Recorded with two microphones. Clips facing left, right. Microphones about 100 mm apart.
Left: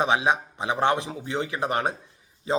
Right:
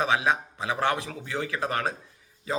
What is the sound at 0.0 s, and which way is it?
A man's voice, 20° left (ahead or behind).